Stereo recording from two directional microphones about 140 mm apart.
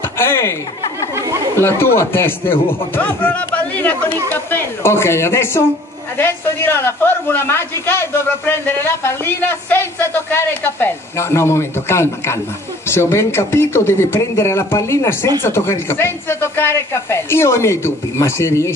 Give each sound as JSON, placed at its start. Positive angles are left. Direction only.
{"t": 0.2, "sound": "speech", "side_deg": 15}
{"t": 1.6, "sound": "a woman's voice", "side_deg": 20}